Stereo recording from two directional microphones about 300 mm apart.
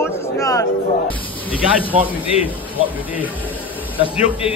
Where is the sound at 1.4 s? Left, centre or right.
Centre.